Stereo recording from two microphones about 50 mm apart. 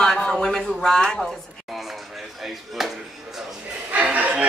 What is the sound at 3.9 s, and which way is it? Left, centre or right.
Music, right.